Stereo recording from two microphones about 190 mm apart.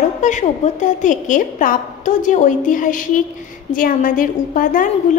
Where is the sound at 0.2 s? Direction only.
40° left (ahead or behind).